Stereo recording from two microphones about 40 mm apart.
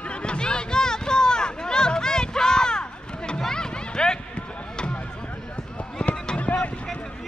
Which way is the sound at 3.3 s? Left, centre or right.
Centre.